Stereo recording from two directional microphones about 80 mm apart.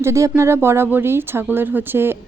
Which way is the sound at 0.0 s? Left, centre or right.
Right.